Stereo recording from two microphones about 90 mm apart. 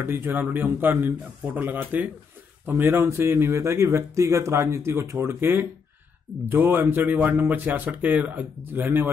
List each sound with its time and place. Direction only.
0.0 s speech: 25° right (ahead or behind)